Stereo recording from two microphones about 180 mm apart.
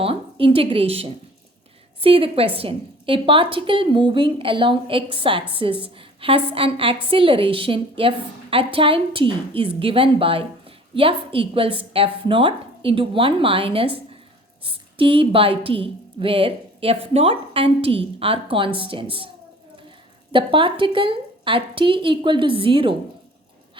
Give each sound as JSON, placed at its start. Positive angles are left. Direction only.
{"t": 0.0, "sound": "a woman's voice", "side_deg": -30}
{"t": 20.3, "sound": "a woman's voice", "side_deg": -30}